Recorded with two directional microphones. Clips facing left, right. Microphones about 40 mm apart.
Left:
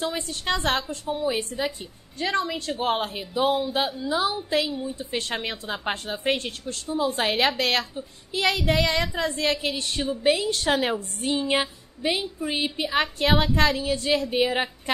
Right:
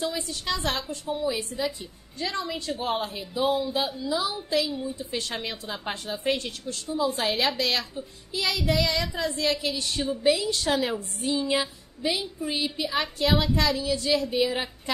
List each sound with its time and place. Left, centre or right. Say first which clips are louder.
0.0 s a woman's voice: left 2 dB; left
1.0 s a woman's voice: left 2 dB; left